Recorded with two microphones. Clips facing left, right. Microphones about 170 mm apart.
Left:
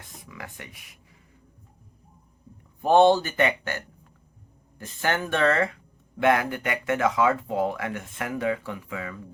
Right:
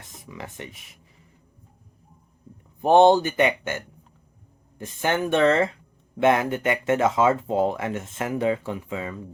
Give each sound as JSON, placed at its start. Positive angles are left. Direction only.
{"t": 0.0, "sound": "speech", "side_deg": -25}
{"t": 2.8, "sound": "speech", "side_deg": -20}